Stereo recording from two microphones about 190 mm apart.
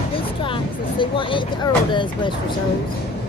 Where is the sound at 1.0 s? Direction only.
25° left (ahead or behind).